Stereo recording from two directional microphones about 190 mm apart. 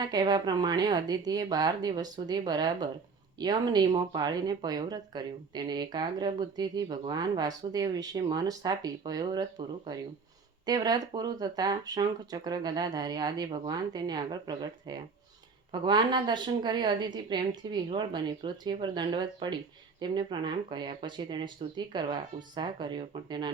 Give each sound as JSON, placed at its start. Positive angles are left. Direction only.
{"t": 0.1, "sound": "speech", "side_deg": -20}